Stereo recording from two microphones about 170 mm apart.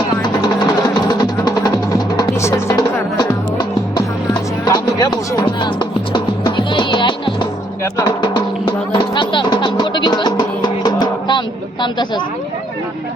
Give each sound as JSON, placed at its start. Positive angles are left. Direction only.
{"t": 0.4, "sound": "music", "side_deg": 25}